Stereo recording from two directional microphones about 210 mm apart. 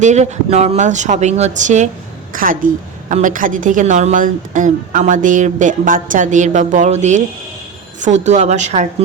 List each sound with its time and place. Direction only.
0.0 s speech: 35° right (ahead or behind)